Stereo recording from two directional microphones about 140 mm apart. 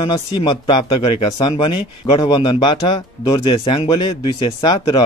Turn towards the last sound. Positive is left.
turn(degrees=30)  # may be behind; listen again after turning